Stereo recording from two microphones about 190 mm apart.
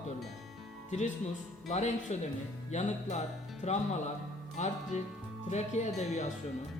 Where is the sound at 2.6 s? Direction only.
35° left (ahead or behind).